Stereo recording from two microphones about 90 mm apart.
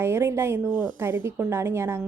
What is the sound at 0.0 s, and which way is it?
A woman's voice, 25° right (ahead or behind).